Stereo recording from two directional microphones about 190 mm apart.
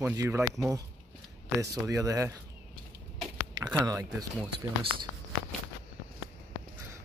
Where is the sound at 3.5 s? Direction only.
20° right (ahead or behind).